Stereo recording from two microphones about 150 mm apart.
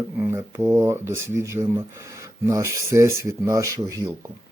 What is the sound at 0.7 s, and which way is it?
Mantra, 20° right (ahead or behind).